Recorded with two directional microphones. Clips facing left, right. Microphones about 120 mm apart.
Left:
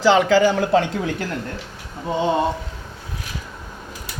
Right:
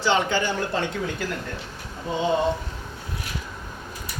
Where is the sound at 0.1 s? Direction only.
90° left.